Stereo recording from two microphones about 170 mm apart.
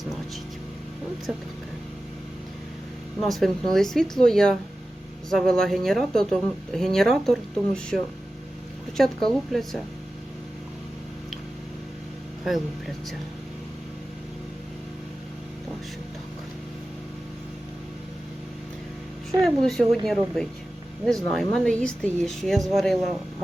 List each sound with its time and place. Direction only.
1.3 s a woman's voice: centre (ahead or behind)
3.2 s a woman's voice: centre (ahead or behind)
9.0 s a woman's voice: centre (ahead or behind)
19.4 s a woman's voice: centre (ahead or behind)